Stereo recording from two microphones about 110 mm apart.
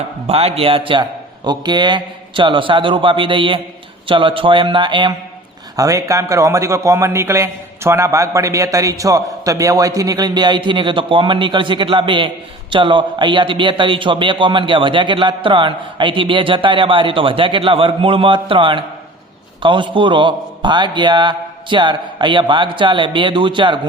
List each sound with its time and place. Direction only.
0.3 s a man's voice: 65° right (ahead or behind)
1.5 s a man's voice: 40° right (ahead or behind)
5.7 s a man's voice: 30° right (ahead or behind); by 23.8 s 45° right (ahead or behind)